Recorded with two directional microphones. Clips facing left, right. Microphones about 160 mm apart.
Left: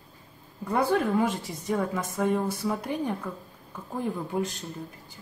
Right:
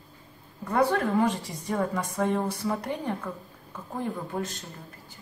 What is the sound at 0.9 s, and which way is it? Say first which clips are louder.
A woman's voice: even; 5° left (ahead or behind).